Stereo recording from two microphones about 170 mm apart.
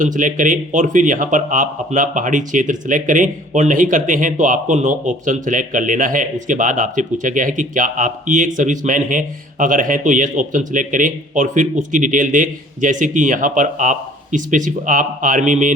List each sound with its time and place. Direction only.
0.0 s speech: 50° right (ahead or behind)